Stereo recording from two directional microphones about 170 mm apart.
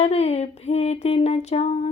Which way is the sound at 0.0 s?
40° left (ahead or behind).